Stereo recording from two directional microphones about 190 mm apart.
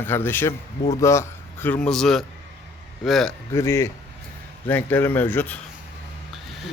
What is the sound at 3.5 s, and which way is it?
A man's voice, 15° left (ahead or behind).